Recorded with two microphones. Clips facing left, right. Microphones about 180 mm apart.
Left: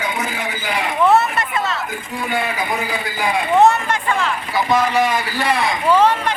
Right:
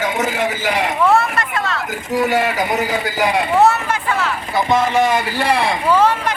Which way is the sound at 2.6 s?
45° right (ahead or behind).